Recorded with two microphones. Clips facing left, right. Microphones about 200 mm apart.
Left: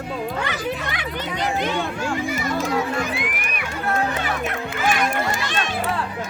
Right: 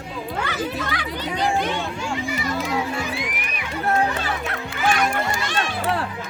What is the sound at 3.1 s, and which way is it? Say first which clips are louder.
Music: left 2 dB; 55° left (ahead or behind).